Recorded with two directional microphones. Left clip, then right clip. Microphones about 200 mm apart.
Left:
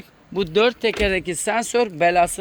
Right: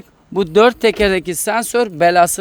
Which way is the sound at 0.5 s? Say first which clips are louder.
Right 7 dB; 40° right (ahead or behind).